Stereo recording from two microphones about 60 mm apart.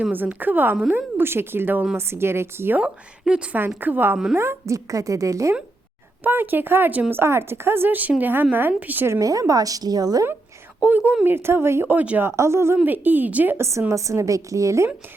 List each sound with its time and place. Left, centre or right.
0.1 s a woman's voice: right
2.0 s a woman's voice: right
2.7 s a woman's voice: centre
3.8 s a woman's voice: right
4.7 s a woman's voice: right
6.2 s a woman's voice: right
9.2 s speech: right
10.8 s speech: right
11.3 s a woman's voice: right
11.9 s speech: right
12.4 s a woman's voice: right
12.8 s a woman's voice: right
13.6 s a woman's voice: right